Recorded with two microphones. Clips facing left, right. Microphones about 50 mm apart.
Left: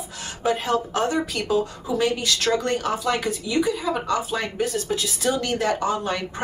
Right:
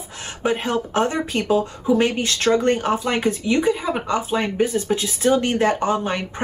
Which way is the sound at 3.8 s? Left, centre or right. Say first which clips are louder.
Right 2 dB; right.